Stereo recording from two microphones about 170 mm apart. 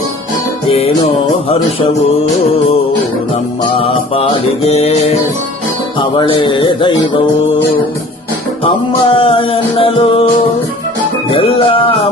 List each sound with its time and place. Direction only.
0.7 s music: 35° left (ahead or behind)
3.6 s music: 35° left (ahead or behind)
6.0 s speech: 30° left (ahead or behind)
8.6 s music: 35° left (ahead or behind)
11.3 s music: 30° left (ahead or behind)